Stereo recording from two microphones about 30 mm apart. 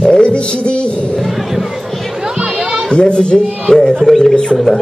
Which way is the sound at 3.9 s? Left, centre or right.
Centre.